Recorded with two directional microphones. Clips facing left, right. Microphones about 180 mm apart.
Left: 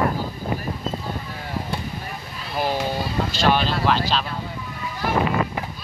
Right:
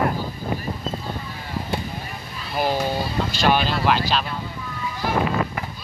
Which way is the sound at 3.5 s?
5° right (ahead or behind).